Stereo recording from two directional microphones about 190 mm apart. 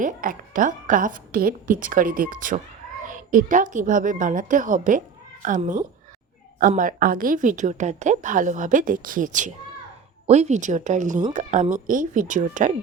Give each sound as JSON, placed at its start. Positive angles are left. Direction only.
{"t": 0.0, "sound": "a woman's voice", "side_deg": -45}